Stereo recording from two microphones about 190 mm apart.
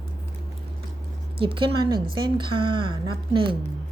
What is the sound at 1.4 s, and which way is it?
Speech, 25° right (ahead or behind).